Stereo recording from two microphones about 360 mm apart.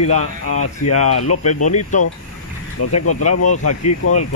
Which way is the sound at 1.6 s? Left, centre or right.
Centre.